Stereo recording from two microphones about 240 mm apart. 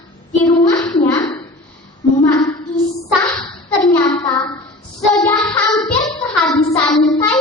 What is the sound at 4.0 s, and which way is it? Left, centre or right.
Child singing, centre.